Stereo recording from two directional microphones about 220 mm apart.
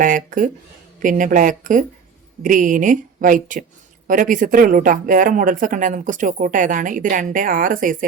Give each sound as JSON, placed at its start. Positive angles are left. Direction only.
{"t": 0.0, "sound": "speech", "side_deg": -35}